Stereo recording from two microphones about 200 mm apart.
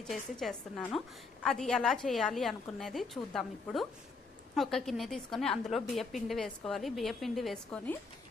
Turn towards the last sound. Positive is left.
turn(degrees=5)  # may be behind; listen again after turning